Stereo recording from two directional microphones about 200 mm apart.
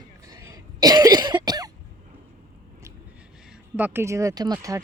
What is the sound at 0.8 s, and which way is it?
Cough, 20° right (ahead or behind).